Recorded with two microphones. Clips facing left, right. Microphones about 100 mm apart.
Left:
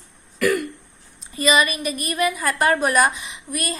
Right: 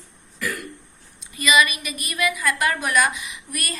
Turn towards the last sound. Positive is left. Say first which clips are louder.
# left 4 dB
turn(degrees=25)  # may be behind; listen again after turning